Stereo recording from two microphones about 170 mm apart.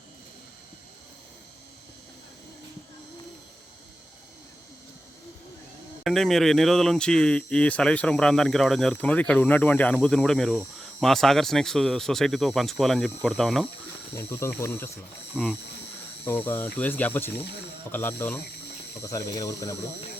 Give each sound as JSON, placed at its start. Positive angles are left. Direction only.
{"t": 6.0, "sound": "speech", "side_deg": 0}
{"t": 14.1, "sound": "speech", "side_deg": 15}
{"t": 15.3, "sound": "speech", "side_deg": 0}
{"t": 16.2, "sound": "speech", "side_deg": 10}